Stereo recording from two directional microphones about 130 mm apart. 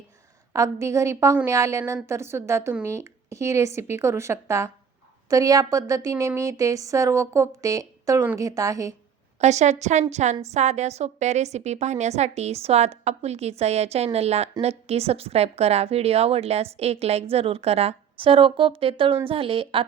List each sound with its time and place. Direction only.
0.5 s a woman's voice: 25° right (ahead or behind)
9.4 s a woman's voice: 60° right (ahead or behind); by 19.8 s 45° right (ahead or behind)